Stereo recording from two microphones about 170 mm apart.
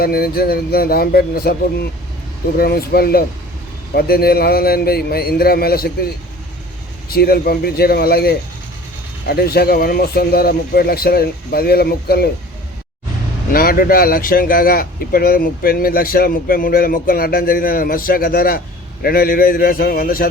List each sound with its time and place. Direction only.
0.0 s speech: 60° left (ahead or behind)
7.1 s speech: 65° left (ahead or behind)
13.5 s speech: 60° left (ahead or behind)